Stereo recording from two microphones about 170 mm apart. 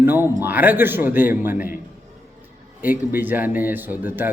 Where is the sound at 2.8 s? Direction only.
10° right (ahead or behind).